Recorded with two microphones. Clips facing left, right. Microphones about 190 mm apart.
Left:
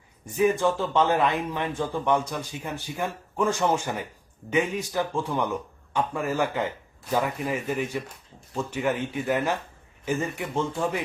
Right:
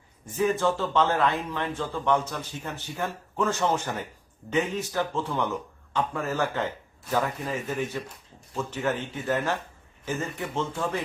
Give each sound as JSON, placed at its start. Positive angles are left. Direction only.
{"t": 0.3, "sound": "a man's voice", "side_deg": 15}